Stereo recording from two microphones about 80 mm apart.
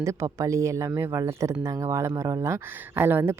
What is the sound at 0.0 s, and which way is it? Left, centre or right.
Speech, right.